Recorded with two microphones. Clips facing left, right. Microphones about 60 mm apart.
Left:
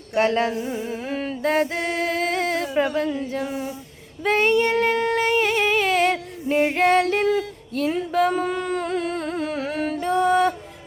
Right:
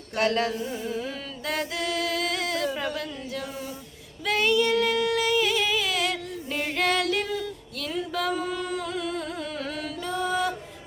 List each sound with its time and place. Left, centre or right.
0.2 s a sound: left
2.7 s speech: left
4.3 s singing: left
6.6 s female singing: left